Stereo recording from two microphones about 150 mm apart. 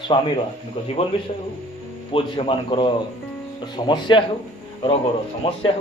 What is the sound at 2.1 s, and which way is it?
Speech, 35° left (ahead or behind).